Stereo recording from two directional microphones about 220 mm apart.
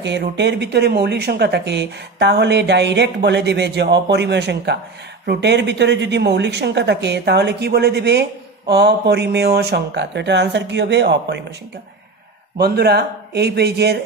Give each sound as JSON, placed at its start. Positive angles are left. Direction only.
{"t": 0.0, "sound": "speech", "side_deg": -50}
{"t": 12.5, "sound": "speech", "side_deg": -45}